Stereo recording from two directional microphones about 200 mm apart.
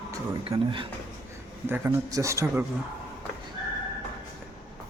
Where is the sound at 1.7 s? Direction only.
10° right (ahead or behind).